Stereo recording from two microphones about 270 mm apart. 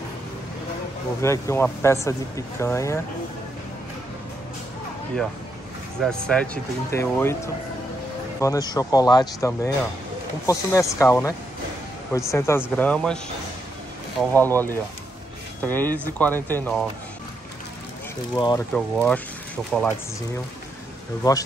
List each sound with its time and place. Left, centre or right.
1.2 s speech: centre
5.9 s speech: centre
8.4 s speech: centre
14.3 s speech: centre
18.3 s speech: centre
18.7 s speech: centre
21.2 s speech: centre